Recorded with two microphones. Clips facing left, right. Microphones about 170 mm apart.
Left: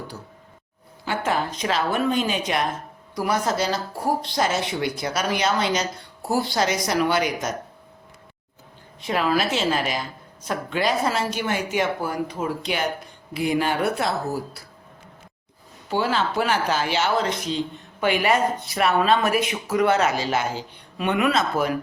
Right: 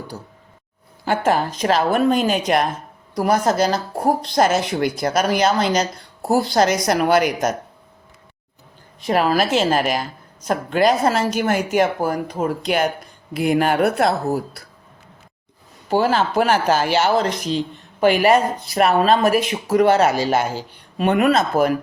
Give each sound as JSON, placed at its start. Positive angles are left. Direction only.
{"t": 1.0, "sound": "speech", "side_deg": -45}
{"t": 9.0, "sound": "speech", "side_deg": -40}
{"t": 15.9, "sound": "speech", "side_deg": -45}